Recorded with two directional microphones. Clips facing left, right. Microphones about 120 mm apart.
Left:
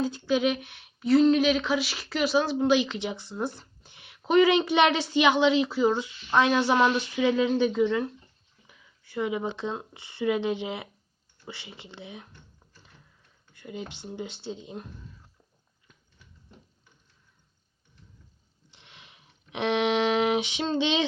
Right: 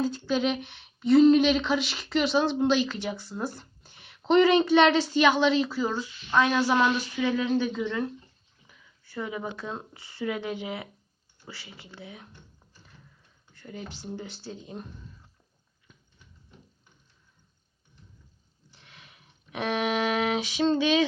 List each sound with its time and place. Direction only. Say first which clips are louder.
0.0 s speech: left 1 dB; 15° left (ahead or behind)
8.6 s a sound: even; 15° left (ahead or behind)
9.9 s speech: left 5 dB; 20° left (ahead or behind)
13.5 s speech: left 2 dB; 15° left (ahead or behind)
18.7 s a sound: even; 20° left (ahead or behind)
20.7 s speech: left 1 dB; 25° left (ahead or behind)